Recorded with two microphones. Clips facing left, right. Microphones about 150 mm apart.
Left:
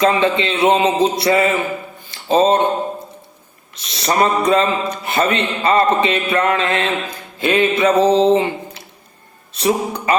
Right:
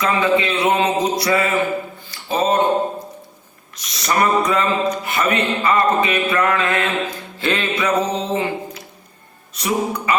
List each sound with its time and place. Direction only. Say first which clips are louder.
0.0 s speech: left 2 dB; 25° left (ahead or behind)
2.0 s a sound: left 6 dB; 25° left (ahead or behind)
3.8 s speech: left 2 dB; 30° left (ahead or behind)